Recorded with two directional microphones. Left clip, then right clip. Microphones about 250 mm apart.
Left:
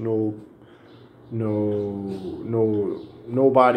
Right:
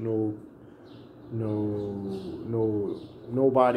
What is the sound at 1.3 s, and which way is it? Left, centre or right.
Speech, centre.